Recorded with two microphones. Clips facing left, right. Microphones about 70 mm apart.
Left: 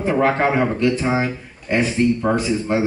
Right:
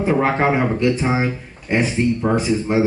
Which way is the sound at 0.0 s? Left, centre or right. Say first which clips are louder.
Even; centre.